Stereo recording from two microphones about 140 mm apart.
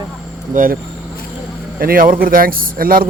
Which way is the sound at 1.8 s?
85° right.